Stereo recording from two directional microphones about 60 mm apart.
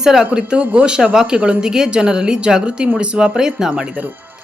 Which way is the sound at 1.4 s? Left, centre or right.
Right.